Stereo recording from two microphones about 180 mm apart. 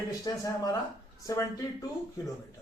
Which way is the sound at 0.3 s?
20° left (ahead or behind).